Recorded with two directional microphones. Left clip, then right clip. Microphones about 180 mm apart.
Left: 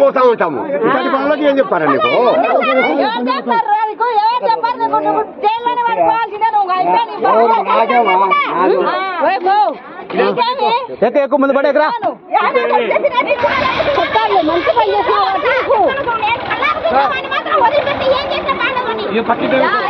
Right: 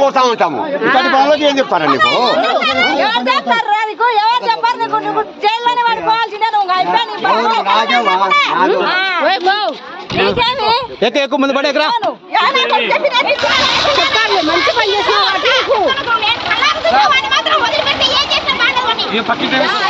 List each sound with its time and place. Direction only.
0.0 s a man's voice: 40° right (ahead or behind)
3.0 s a woman's voice: centre (ahead or behind)
7.3 s speech: 40° right (ahead or behind)
10.4 s speech: 5° right (ahead or behind)
11.0 s speech: 35° right (ahead or behind)
12.4 s speech: 40° right (ahead or behind)
16.6 s speech: 35° right (ahead or behind)